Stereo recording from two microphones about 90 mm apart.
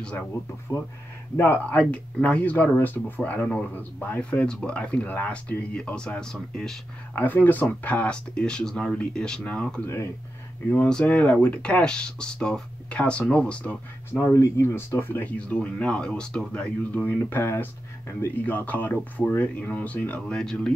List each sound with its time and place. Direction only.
0.0 s speech: 10° left (ahead or behind)
0.7 s speech: 40° left (ahead or behind)
1.3 s speech: 25° left (ahead or behind)
1.8 s speech: 15° left (ahead or behind)
7.2 s speech: 20° left (ahead or behind)
14.1 s speech: 30° left (ahead or behind)
20.3 s speech: 5° left (ahead or behind)